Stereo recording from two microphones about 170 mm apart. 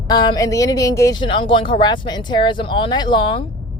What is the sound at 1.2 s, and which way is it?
Speech, 30° left (ahead or behind).